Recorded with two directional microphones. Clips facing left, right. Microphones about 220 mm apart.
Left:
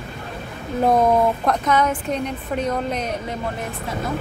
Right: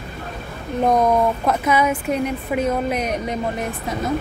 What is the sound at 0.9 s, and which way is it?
A woman's voice, 5° left (ahead or behind).